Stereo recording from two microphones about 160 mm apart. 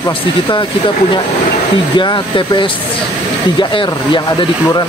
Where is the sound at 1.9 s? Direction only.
30° left (ahead or behind).